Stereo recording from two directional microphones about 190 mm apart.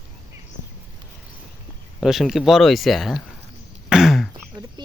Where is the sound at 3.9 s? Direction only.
Centre (ahead or behind).